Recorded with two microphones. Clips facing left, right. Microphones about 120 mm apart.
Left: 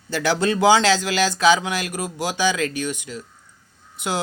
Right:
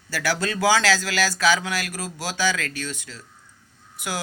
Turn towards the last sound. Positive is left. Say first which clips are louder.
# left 5 dB
turn(degrees=25)  # may be behind; listen again after turning